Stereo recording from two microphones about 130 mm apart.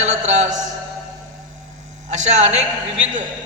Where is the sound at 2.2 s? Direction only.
60° right (ahead or behind).